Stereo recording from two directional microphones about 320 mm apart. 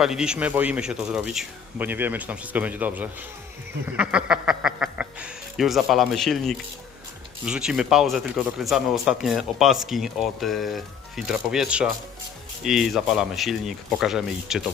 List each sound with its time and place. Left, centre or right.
0.0 s speech: centre